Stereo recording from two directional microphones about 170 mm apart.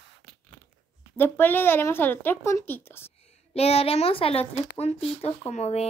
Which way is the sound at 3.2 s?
35° left (ahead or behind).